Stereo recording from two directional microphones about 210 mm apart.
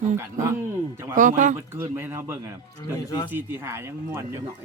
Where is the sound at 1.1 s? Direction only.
40° right (ahead or behind).